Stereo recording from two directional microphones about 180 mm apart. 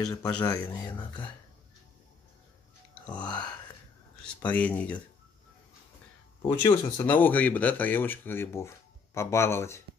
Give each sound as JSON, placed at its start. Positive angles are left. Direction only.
{"t": 0.0, "sound": "speech", "side_deg": 20}
{"t": 3.1, "sound": "speech", "side_deg": 5}
{"t": 6.4, "sound": "speech", "side_deg": 15}